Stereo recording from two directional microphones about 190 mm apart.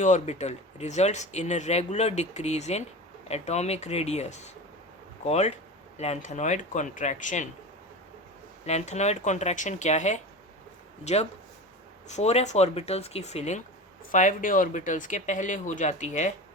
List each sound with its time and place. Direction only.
0.0 s speech: 40° left (ahead or behind)
8.6 s speech: 35° left (ahead or behind)